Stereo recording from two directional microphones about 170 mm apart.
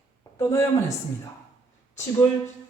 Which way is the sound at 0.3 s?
15° left (ahead or behind).